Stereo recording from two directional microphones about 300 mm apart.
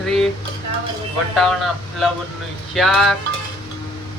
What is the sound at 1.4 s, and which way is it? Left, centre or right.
Speech, centre.